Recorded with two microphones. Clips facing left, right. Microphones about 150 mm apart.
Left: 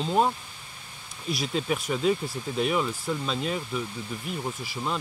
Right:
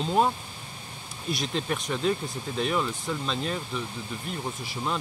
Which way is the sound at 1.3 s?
5° left (ahead or behind).